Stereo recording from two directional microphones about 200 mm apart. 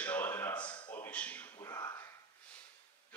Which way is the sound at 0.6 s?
20° left (ahead or behind).